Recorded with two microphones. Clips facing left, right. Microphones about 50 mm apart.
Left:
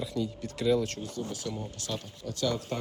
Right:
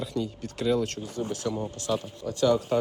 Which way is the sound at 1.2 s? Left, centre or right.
Right.